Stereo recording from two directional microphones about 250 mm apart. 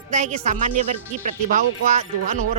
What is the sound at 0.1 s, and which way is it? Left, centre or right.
Speech, right.